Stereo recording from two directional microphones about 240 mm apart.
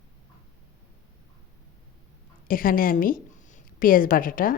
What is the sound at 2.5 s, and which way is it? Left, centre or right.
A woman's voice, left.